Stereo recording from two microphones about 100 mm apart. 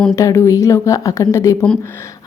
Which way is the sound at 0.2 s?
30° left (ahead or behind).